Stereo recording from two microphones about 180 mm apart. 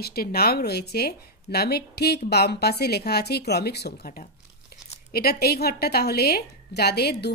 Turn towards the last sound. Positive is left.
turn(degrees=65)  # may be behind; listen again after turning